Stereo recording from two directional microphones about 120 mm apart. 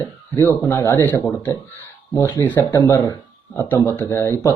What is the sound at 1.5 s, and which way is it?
A man's voice, 25° left (ahead or behind).